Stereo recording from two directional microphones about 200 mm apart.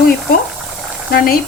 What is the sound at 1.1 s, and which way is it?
Speech, 50° left (ahead or behind).